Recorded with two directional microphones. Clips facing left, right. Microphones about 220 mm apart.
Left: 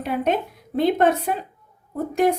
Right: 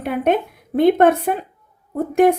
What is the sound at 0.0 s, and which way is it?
A woman's voice, 55° right (ahead or behind).